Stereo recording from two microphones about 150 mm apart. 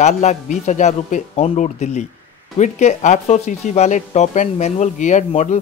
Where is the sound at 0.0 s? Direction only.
50° left (ahead or behind).